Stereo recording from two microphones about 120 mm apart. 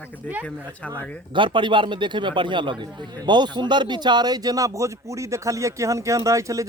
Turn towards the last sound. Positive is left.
turn(degrees=-25)  # may be behind; listen again after turning